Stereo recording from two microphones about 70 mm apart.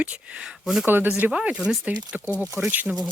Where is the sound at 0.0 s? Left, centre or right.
Centre.